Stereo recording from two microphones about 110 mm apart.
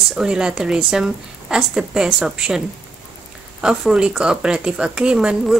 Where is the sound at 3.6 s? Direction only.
5° right (ahead or behind).